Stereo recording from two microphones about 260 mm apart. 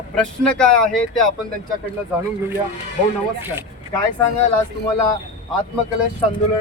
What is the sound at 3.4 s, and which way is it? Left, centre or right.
Speech, centre.